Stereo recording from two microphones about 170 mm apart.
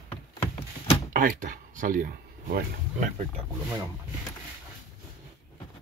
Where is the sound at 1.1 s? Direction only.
55° right (ahead or behind).